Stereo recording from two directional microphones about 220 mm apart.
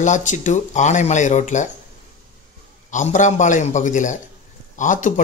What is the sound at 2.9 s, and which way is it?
Speech, 35° left (ahead or behind).